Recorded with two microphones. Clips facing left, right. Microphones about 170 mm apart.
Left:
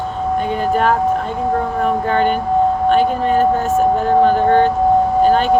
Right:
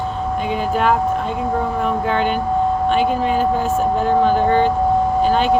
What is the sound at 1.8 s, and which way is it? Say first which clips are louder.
Speech: left 5 dB; 50° left (ahead or behind).